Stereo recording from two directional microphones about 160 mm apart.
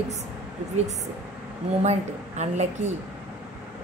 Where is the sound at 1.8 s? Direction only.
45° right (ahead or behind).